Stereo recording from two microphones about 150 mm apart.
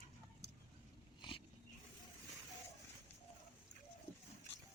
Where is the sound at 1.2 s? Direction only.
35° left (ahead or behind).